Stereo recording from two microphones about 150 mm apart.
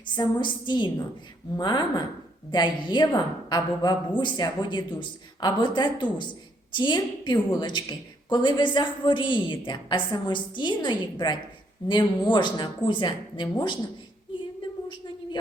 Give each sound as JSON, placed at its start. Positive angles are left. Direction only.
{"t": 0.0, "sound": "a woman's voice", "side_deg": 30}